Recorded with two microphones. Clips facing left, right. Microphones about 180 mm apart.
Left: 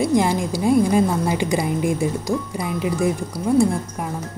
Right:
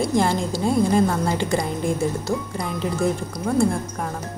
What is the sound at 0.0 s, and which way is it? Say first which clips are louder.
Speech: left 2 dB; 15° left (ahead or behind).